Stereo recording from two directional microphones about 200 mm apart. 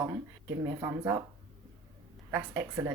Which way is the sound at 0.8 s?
20° right (ahead or behind).